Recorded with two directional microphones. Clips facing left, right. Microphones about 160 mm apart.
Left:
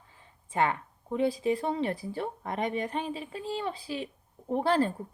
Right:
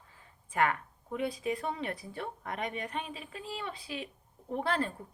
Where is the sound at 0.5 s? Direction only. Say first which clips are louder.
Left 2 dB; 25° left (ahead or behind).